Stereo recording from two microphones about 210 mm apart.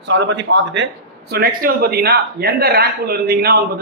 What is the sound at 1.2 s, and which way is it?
A man's voice, 45° right (ahead or behind).